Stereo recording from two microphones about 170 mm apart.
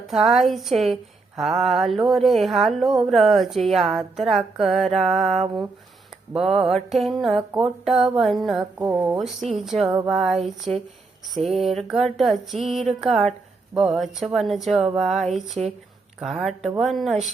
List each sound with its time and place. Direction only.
0.1 s speech: centre (ahead or behind)
8.8 s speech: 15° right (ahead or behind)
9.1 s speech: centre (ahead or behind)